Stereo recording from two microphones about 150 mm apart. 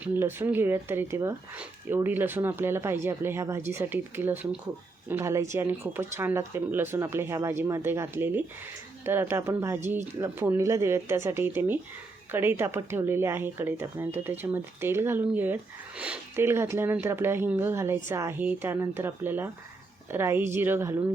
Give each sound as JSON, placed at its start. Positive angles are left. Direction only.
{"t": 0.0, "sound": "speech", "side_deg": -15}